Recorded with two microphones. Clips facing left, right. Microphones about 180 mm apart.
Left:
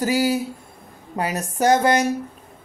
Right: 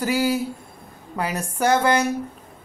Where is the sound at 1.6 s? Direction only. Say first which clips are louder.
Left 2 dB; 35° left (ahead or behind).